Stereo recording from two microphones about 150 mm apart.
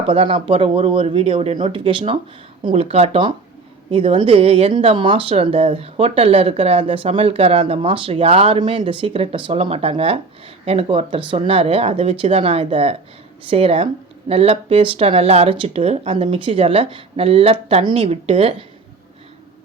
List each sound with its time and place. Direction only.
0.1 s speech: 35° right (ahead or behind)